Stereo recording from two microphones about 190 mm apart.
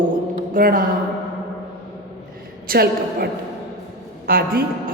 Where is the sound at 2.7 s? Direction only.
55° right (ahead or behind).